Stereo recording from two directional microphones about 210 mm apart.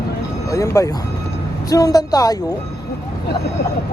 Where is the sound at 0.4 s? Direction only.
15° left (ahead or behind).